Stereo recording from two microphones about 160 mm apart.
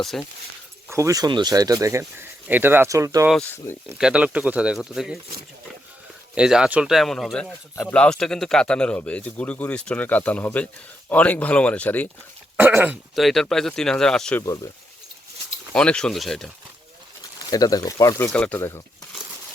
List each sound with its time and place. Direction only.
0.0 s speech: centre (ahead or behind)
0.9 s speech: 20° right (ahead or behind)
3.4 s speech: 15° left (ahead or behind)
3.9 s speech: 5° right (ahead or behind)
6.3 s speech: 5° right (ahead or behind)
7.8 s speech: 10° left (ahead or behind)
12.5 s speech: 10° right (ahead or behind)
13.1 s speech: centre (ahead or behind)
14.4 s speech: 20° left (ahead or behind)
15.7 s speech: 5° left (ahead or behind)
17.5 s speech: 25° left (ahead or behind)
18.3 s speech: 10° left (ahead or behind)